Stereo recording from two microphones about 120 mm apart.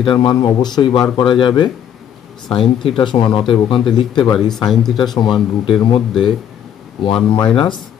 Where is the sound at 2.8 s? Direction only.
45° left (ahead or behind).